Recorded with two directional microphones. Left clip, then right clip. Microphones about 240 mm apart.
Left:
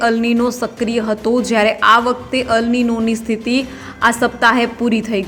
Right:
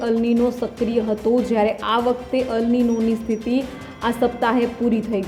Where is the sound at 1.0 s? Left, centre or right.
Left.